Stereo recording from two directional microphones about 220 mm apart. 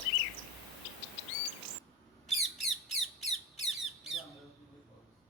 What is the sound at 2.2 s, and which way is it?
Squawk, centre (ahead or behind).